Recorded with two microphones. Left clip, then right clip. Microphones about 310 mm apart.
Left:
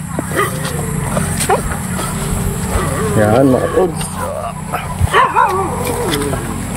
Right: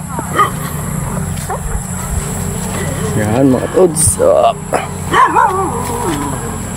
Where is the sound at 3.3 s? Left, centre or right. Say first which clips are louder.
Even; centre.